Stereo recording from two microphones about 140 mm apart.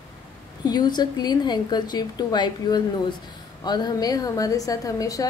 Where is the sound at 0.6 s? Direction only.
30° left (ahead or behind).